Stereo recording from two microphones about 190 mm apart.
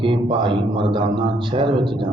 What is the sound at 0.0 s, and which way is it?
A man's voice, 25° right (ahead or behind).